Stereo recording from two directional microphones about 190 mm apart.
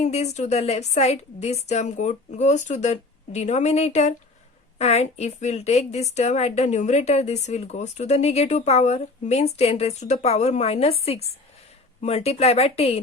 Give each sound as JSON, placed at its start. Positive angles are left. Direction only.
{"t": 0.0, "sound": "a woman's voice", "side_deg": 35}